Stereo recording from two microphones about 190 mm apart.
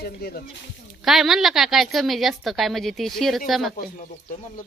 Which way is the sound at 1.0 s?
Centre (ahead or behind).